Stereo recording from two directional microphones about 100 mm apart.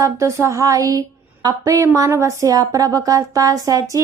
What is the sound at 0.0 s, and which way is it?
A woman's voice, 30° right (ahead or behind).